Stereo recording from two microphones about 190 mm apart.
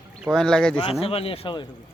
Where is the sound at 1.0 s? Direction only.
30° left (ahead or behind).